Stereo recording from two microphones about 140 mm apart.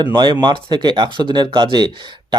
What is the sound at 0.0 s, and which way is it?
Speech, 30° right (ahead or behind).